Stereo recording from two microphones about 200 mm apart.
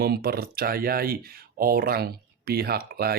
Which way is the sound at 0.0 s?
50° right (ahead or behind).